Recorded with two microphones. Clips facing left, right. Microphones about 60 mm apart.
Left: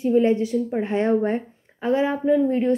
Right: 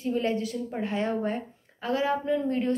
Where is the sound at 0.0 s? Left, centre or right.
Left.